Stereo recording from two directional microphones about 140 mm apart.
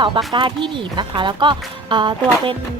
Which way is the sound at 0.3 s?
35° right (ahead or behind).